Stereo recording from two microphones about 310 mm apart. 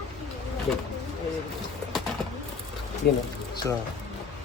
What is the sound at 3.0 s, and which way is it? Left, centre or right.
Speech, left.